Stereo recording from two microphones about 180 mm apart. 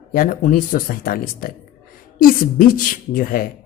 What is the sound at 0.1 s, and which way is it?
A woman's voice, 50° left (ahead or behind).